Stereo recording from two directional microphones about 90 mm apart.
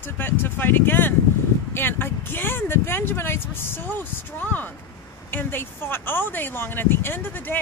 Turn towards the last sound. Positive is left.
turn(degrees=20)  # may be behind; listen again after turning